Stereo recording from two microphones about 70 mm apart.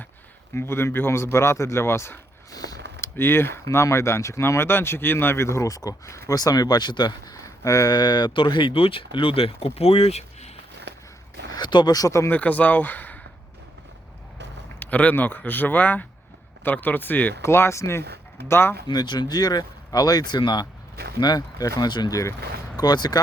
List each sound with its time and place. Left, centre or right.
0.5 s speech: left
2.5 s a sound: left
3.0 s speech: left
7.4 s a sound: left
7.9 s speech: left
11.5 s speech: left
12.3 s speech: left
14.8 s speech: left
17.4 s speech: left
18.9 s speech: left
21.2 s speech: left